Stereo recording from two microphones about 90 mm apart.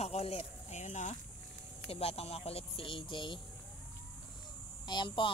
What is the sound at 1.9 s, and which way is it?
Speech, 90° left.